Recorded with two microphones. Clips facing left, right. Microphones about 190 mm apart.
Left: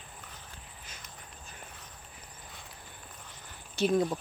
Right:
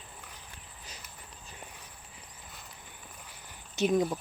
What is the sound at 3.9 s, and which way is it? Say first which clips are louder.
Speech: even; 5° right (ahead or behind).